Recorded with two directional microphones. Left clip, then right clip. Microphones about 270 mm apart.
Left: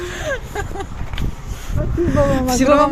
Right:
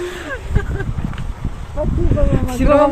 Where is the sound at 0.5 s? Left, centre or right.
Left.